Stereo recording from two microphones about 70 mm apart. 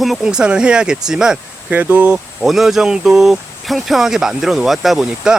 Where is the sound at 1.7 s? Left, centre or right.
Right.